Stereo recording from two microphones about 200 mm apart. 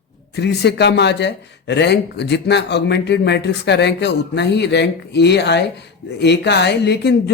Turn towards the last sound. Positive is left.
turn(degrees=55)  # may be behind; listen again after turning